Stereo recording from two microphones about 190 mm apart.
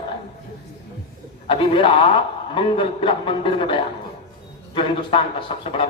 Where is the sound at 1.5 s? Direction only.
30° left (ahead or behind).